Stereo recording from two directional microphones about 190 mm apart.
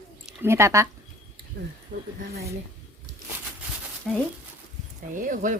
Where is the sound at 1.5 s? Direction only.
55° right (ahead or behind).